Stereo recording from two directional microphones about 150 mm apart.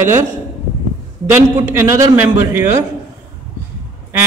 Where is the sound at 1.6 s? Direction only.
20° right (ahead or behind).